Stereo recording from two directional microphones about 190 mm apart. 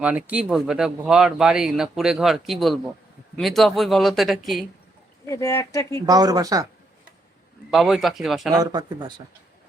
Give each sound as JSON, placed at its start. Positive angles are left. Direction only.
{"t": 0.0, "sound": "speech", "side_deg": -5}
{"t": 5.2, "sound": "speech", "side_deg": 15}
{"t": 6.1, "sound": "speech", "side_deg": -20}
{"t": 7.7, "sound": "speech", "side_deg": 0}
{"t": 8.6, "sound": "speech", "side_deg": -20}